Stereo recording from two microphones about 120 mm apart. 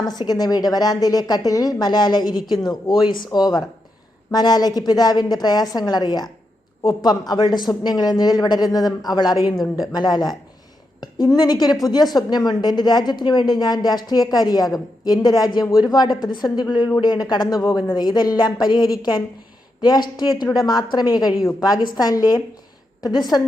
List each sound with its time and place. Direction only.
0.0 s a woman's voice: 35° left (ahead or behind)
3.3 s a woman's voice: 35° left (ahead or behind)